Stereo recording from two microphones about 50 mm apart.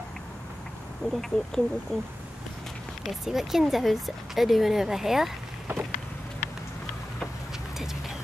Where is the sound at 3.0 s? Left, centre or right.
Centre.